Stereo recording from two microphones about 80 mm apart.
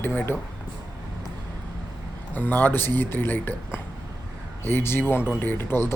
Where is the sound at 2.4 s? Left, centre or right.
Left.